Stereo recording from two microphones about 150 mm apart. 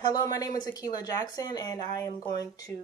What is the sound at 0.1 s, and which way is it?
Speech, 25° left (ahead or behind).